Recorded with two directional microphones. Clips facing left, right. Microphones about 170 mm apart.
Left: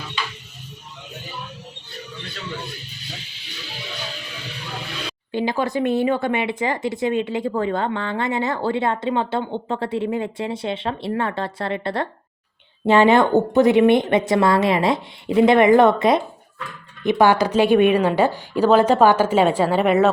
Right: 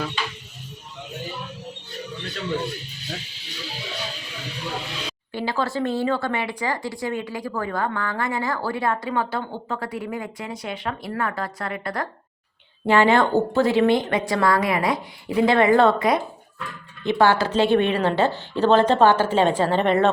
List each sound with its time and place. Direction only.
5.3 s speech: 20° left (ahead or behind)